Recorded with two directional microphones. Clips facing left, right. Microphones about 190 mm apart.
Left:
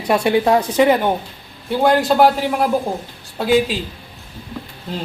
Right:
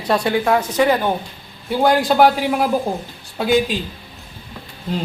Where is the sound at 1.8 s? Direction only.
Centre (ahead or behind).